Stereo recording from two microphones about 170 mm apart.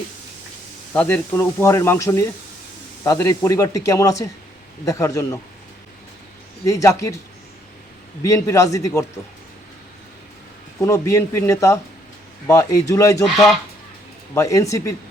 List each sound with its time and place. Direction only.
0.9 s speech: 10° left (ahead or behind)
6.7 s speech: 20° left (ahead or behind)
8.2 s speech: 20° left (ahead or behind)
10.8 s speech: 15° left (ahead or behind)
13.2 s speech: centre (ahead or behind)
14.3 s speech: 20° left (ahead or behind)